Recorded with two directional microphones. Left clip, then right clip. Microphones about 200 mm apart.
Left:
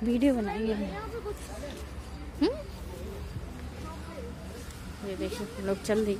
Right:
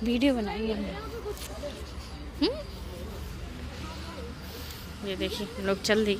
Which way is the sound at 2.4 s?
25° left (ahead or behind).